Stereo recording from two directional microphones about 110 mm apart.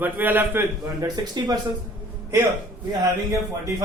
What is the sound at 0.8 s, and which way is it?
Speech, 35° right (ahead or behind).